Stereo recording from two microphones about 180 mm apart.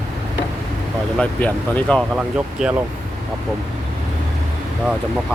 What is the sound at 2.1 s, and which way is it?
Speech, 5° right (ahead or behind).